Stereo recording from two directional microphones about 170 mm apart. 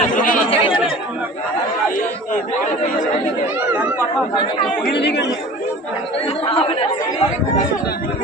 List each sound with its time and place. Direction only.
0.1 s chatter: 50° left (ahead or behind)
0.5 s chatter: 30° left (ahead or behind)
2.0 s chatter: 50° left (ahead or behind)
4.9 s speech: 80° left
6.4 s speech: 35° left (ahead or behind)